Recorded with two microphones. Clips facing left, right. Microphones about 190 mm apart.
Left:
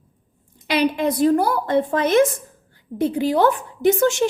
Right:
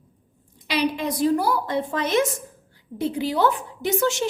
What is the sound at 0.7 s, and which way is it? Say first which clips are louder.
A woman's voice: left 4 dB; 55° left (ahead or behind).